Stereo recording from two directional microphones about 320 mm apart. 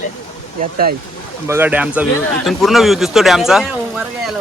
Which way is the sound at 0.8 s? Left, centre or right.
Right.